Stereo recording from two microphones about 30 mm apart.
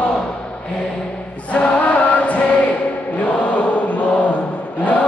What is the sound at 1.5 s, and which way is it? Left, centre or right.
Music, left.